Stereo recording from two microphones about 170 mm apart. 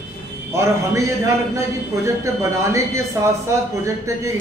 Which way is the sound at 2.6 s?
15° right (ahead or behind).